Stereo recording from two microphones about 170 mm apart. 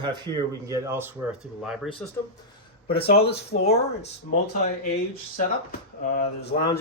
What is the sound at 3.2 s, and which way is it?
Speech, 70° left (ahead or behind).